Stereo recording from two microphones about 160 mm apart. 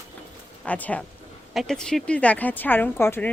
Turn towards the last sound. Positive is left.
turn(degrees=15)  # may be behind; listen again after turning